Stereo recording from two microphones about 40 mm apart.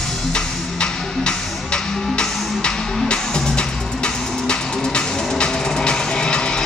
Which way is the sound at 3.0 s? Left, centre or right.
Centre.